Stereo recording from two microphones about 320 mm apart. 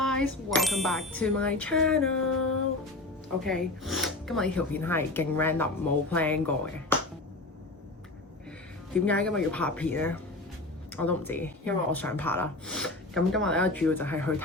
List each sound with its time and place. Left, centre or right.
0.0 s speech: centre
2.1 s a sound: left
3.4 s speech: centre
9.0 s speech: centre